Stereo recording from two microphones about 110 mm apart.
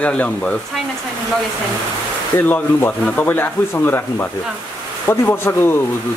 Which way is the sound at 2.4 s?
20° left (ahead or behind).